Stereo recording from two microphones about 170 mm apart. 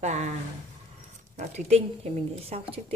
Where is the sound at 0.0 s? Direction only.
45° right (ahead or behind).